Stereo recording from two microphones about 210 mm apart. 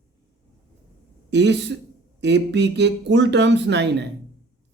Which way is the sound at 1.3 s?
55° right (ahead or behind).